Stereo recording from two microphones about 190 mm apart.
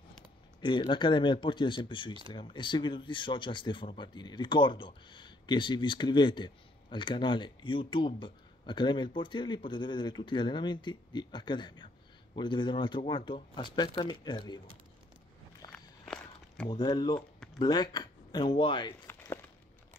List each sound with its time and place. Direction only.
0.6 s a man's voice: 25° left (ahead or behind)
15.6 s walk: 20° left (ahead or behind)
16.1 s walk: 5° left (ahead or behind)
16.6 s a man's voice: 20° left (ahead or behind)
19.0 s a sound: 10° left (ahead or behind)